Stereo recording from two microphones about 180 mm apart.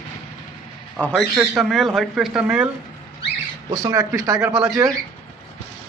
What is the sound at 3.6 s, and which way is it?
Speech, 20° right (ahead or behind).